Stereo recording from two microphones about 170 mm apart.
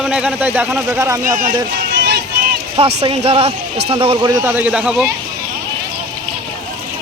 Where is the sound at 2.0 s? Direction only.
80° right.